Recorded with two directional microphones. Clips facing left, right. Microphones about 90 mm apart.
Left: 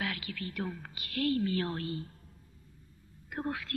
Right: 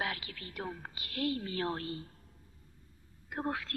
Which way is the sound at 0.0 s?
30° right (ahead or behind).